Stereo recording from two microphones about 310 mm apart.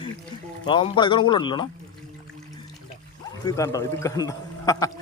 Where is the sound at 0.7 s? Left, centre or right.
Centre.